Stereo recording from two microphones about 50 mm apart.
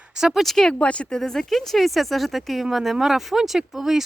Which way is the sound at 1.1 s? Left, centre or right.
Centre.